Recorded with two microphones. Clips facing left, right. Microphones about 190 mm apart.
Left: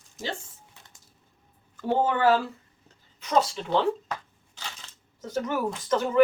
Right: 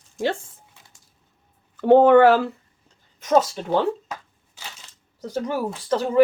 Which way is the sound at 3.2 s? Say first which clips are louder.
Right 5 dB; 45° right (ahead or behind).